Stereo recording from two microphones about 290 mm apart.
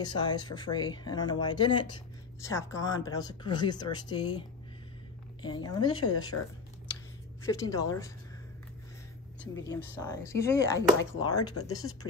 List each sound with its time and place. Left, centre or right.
0.0 s speech: centre
6.3 s speech: left
7.4 s speech: centre
9.7 s speech: centre